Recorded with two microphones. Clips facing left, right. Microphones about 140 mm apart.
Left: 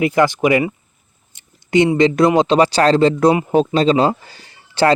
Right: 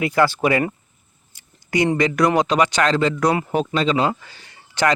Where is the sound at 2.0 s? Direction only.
25° left (ahead or behind).